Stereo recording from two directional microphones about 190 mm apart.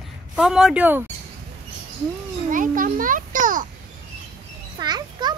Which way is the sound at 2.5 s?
45° right (ahead or behind).